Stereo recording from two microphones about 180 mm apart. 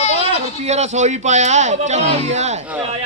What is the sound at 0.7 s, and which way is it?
Speech, 40° right (ahead or behind).